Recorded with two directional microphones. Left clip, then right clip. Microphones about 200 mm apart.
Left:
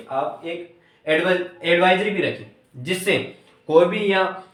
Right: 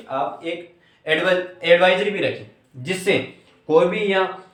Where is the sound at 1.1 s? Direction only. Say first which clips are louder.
Right 1 dB; 45° right (ahead or behind).